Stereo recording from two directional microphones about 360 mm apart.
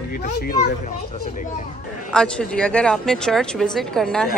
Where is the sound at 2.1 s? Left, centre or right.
Centre.